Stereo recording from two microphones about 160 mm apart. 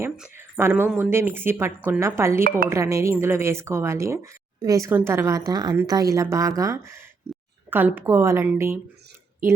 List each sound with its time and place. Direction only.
0.3 s speech: 15° right (ahead or behind)